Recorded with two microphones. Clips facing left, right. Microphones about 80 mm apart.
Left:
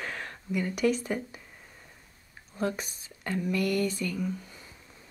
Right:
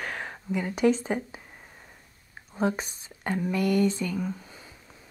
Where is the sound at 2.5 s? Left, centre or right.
Right.